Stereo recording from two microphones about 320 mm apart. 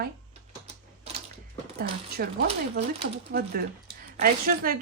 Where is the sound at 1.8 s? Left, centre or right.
Right.